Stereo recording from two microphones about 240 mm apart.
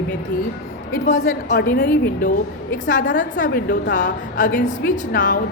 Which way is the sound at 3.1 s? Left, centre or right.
Left.